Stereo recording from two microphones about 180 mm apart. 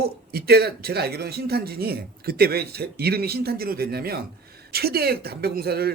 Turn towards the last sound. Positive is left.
turn(degrees=-60)  # may be behind; listen again after turning